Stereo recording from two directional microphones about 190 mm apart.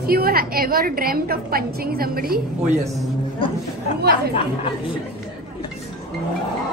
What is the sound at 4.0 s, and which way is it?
Speech, 55° right (ahead or behind).